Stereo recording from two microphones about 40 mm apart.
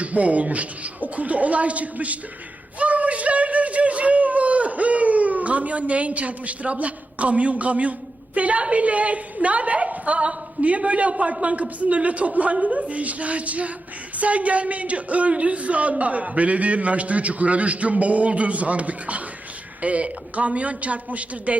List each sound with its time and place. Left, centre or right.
0.0 s speech: right
2.7 s a sound: right
8.4 s speech: right